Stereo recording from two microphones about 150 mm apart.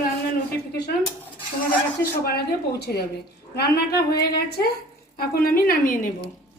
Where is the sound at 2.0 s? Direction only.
90° left; by 6.1 s 65° left (ahead or behind).